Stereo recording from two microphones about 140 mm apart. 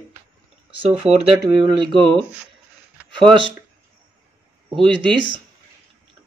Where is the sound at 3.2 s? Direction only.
40° right (ahead or behind).